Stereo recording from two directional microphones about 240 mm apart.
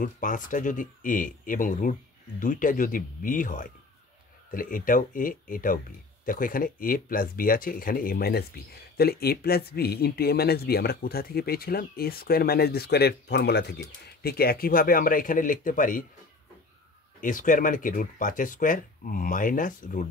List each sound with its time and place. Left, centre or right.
0.0 s speech: left
17.2 s speech: left